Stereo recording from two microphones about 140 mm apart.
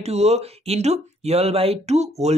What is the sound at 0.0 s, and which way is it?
Speech, 50° right (ahead or behind).